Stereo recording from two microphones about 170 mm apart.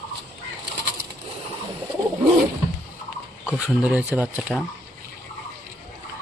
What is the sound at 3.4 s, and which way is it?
Speech, 5° right (ahead or behind).